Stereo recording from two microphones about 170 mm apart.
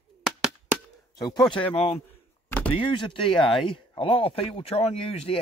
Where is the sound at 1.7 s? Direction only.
35° left (ahead or behind).